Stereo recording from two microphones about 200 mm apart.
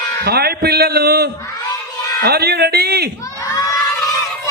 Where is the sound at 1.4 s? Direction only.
15° left (ahead or behind).